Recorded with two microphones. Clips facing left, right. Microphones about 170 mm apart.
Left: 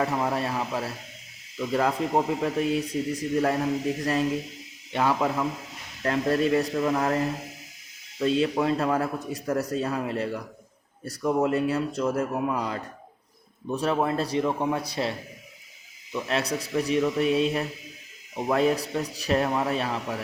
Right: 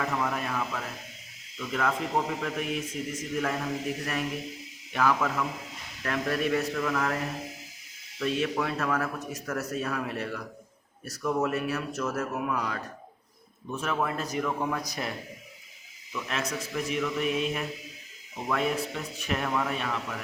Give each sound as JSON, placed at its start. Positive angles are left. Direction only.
{"t": 0.0, "sound": "a man's voice", "side_deg": 35}
{"t": 8.2, "sound": "a man's voice", "side_deg": 30}
{"t": 16.1, "sound": "a man's voice", "side_deg": 35}